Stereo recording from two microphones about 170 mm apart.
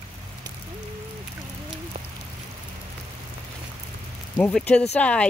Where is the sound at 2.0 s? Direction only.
35° right (ahead or behind).